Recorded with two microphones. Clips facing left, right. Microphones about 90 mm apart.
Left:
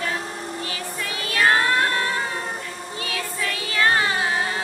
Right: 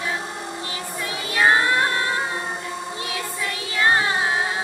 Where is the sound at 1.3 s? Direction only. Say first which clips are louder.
Right 1 dB; 15° right (ahead or behind).